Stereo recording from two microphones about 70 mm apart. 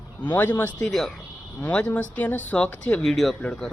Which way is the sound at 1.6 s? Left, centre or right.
Left.